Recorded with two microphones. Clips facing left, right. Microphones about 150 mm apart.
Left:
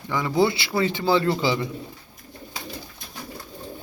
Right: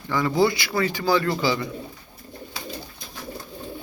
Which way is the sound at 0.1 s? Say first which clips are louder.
Right 1 dB; 15° left (ahead or behind).